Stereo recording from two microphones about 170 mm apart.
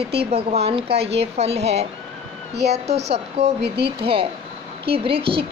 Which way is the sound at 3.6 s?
75° right (ahead or behind).